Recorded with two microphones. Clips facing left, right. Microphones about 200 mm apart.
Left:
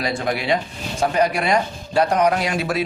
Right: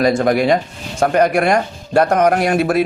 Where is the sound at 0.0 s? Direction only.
50° right (ahead or behind).